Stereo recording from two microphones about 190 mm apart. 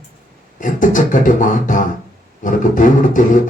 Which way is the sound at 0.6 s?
45° left (ahead or behind).